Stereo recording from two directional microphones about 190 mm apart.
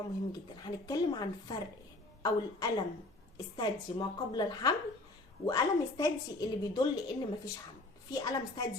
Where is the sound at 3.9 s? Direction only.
25° left (ahead or behind).